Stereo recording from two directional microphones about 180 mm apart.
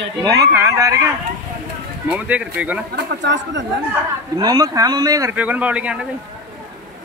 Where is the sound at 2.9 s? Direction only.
80° right.